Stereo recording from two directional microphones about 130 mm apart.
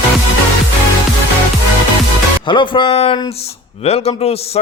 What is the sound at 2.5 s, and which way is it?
Speech, 40° left (ahead or behind).